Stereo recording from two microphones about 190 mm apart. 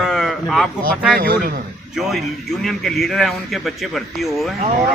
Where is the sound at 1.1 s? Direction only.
50° right (ahead or behind).